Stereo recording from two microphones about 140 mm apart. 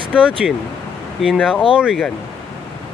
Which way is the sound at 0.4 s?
5° right (ahead or behind).